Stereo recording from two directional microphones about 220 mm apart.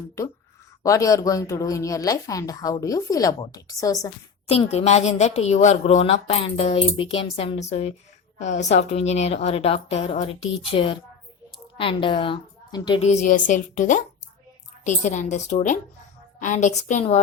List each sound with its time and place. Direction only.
0.8 s speech: 15° left (ahead or behind)
4.4 s a woman's voice: 25° left (ahead or behind)
13.0 s a woman's voice: 35° left (ahead or behind)